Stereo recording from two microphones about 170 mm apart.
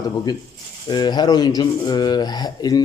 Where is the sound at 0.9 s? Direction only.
25° left (ahead or behind).